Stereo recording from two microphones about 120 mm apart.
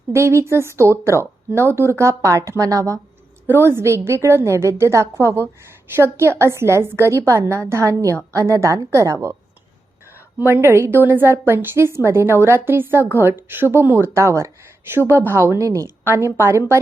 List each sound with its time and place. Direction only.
0.1 s a woman's voice: 20° right (ahead or behind)
10.3 s a woman's voice: 20° right (ahead or behind)